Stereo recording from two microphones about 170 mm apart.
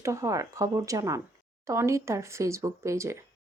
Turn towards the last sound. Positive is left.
turn(degrees=-15)  # may be behind; listen again after turning